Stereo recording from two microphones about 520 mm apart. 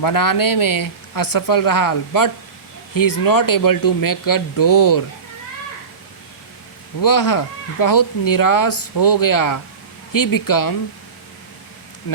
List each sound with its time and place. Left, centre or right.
0.0 s speech: left
7.0 s speech: left